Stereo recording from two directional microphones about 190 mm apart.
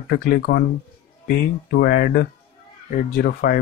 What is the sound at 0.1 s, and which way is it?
Speech, 55° left (ahead or behind).